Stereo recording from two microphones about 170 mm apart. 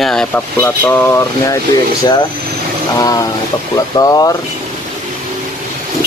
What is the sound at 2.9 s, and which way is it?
Speech, 20° left (ahead or behind).